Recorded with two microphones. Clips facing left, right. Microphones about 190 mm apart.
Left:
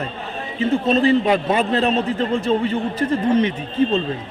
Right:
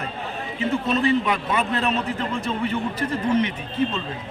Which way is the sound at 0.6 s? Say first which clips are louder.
Left 5 dB; 30° left (ahead or behind).